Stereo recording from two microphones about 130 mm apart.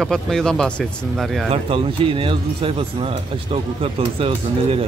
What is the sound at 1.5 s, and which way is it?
Speech, 45° right (ahead or behind).